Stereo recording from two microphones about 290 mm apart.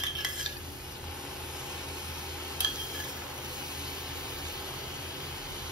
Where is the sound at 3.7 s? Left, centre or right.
Centre.